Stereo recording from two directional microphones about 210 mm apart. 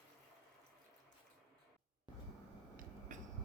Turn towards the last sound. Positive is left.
turn(degrees=-40)  # may be behind; listen again after turning